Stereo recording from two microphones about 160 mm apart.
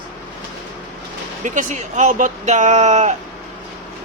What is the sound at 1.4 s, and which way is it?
Speech, 50° right (ahead or behind).